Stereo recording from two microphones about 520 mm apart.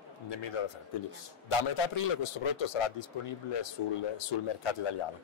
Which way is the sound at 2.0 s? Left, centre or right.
Left.